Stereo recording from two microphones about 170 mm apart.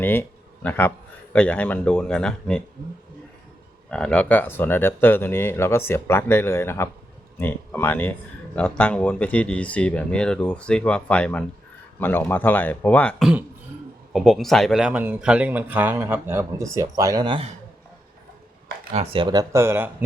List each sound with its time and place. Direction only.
0.0 s a man's voice: 10° left (ahead or behind)
3.8 s a man's voice: 5° left (ahead or behind); by 17.5 s 30° right (ahead or behind)
18.9 s speech: 30° right (ahead or behind)